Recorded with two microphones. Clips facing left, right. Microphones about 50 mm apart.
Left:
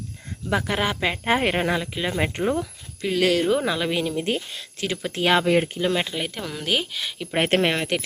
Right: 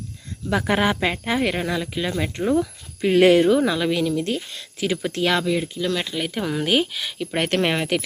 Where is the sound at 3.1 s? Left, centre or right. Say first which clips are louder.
Right 6 dB; right.